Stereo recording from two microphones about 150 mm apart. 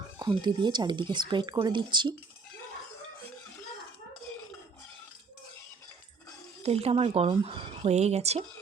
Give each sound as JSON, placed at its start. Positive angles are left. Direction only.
{"t": 0.2, "sound": "speech", "side_deg": -30}
{"t": 6.6, "sound": "speech", "side_deg": -45}